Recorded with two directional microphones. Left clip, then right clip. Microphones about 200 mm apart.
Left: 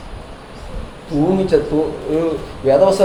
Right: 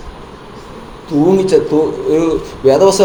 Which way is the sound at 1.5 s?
35° right (ahead or behind).